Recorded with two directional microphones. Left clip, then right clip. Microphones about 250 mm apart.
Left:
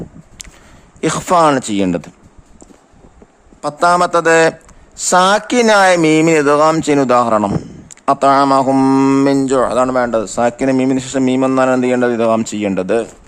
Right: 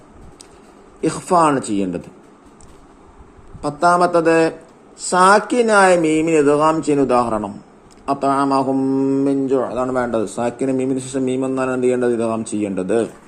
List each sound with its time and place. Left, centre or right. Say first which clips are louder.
1.0 s speech: left 4 dB; left
3.6 s speech: left 3 dB; left
8.6 s mantra: left 7 dB; left
9.2 s speech: left 5 dB; left